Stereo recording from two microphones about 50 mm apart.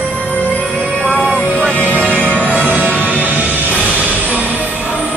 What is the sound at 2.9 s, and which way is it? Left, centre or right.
Music, right.